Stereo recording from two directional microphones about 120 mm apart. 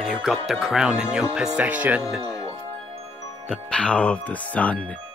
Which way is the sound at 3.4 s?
10° left (ahead or behind).